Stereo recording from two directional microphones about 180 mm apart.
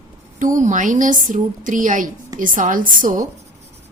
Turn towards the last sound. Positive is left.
turn(degrees=-50)  # may be behind; listen again after turning